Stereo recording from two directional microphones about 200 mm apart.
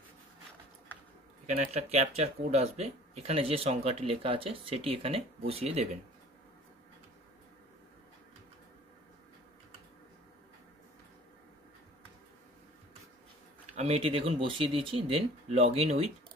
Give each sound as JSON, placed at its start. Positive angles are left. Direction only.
{"t": 1.7, "sound": "speech", "side_deg": -30}
{"t": 13.7, "sound": "speech", "side_deg": -30}